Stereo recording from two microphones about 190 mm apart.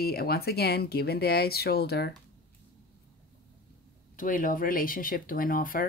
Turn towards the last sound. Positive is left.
turn(degrees=50)  # may be behind; listen again after turning